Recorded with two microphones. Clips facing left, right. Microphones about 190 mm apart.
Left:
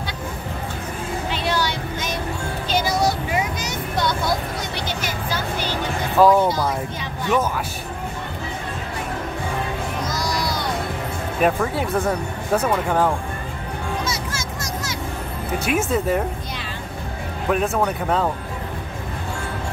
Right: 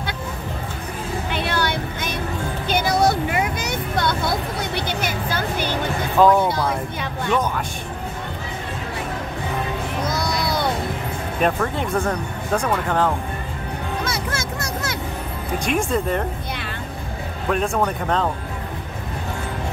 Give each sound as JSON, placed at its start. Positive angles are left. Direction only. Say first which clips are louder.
{"t": 1.3, "sound": "vehicle", "louder": "right 1 dB", "side_deg": -55}
{"t": 2.7, "sound": "a sound", "louder": "right 2 dB", "side_deg": -55}
{"t": 6.1, "sound": "speech", "louder": "left 1 dB", "side_deg": 5}
{"t": 10.0, "sound": "a sound", "louder": "right 2 dB", "side_deg": -60}
{"t": 11.4, "sound": "speech", "louder": "left 1 dB", "side_deg": 5}
{"t": 14.0, "sound": "music", "louder": "right 2 dB", "side_deg": -60}
{"t": 15.6, "sound": "speech", "louder": "left 1 dB", "side_deg": 5}
{"t": 17.5, "sound": "speech", "louder": "left 1 dB", "side_deg": 5}